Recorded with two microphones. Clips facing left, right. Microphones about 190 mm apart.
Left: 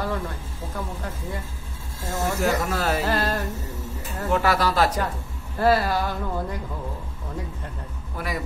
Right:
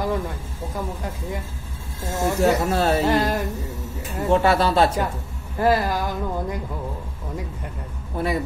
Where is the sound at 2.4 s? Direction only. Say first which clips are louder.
Right 6 dB; 30° right (ahead or behind).